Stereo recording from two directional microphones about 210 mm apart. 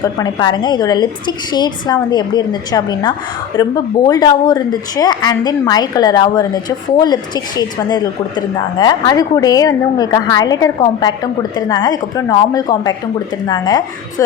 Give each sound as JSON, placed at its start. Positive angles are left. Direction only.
{"t": 0.0, "sound": "speech", "side_deg": 20}